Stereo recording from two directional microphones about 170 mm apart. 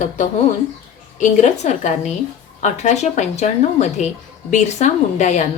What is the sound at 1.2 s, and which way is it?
Speech, 45° left (ahead or behind).